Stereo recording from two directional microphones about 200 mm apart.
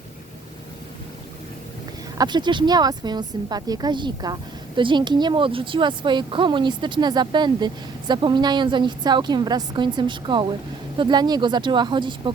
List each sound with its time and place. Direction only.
2.1 s speech: 20° right (ahead or behind)